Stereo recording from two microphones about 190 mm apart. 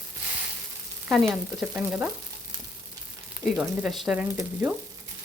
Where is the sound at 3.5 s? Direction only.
Centre (ahead or behind).